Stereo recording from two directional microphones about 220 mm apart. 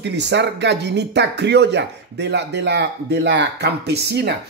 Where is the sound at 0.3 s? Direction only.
50° right (ahead or behind).